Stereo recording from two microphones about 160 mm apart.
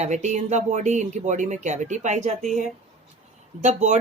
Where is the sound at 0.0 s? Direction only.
45° right (ahead or behind).